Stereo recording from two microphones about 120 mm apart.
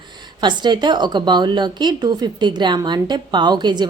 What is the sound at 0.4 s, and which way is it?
Speech, 40° right (ahead or behind).